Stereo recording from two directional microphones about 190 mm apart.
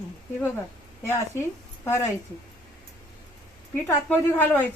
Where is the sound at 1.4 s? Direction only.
15° left (ahead or behind).